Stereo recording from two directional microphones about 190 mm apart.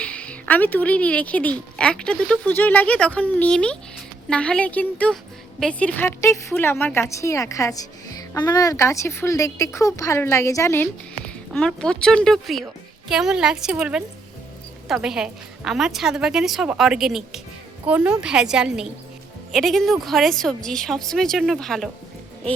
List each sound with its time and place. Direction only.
0.0 s a woman's voice: 5° left (ahead or behind)